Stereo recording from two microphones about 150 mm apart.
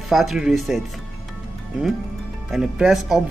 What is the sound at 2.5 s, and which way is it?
Speech, 5° right (ahead or behind).